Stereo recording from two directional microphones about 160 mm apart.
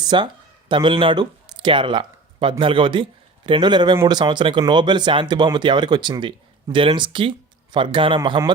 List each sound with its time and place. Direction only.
0.0 s speech: 30° right (ahead or behind)